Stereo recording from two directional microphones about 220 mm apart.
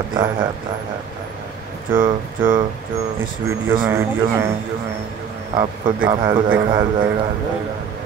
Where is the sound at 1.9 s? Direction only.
40° right (ahead or behind).